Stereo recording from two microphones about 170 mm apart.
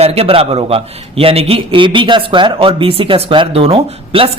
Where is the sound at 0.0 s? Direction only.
35° right (ahead or behind).